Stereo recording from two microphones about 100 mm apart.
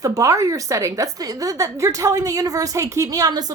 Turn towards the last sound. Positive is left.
turn(degrees=-40)  # may be behind; listen again after turning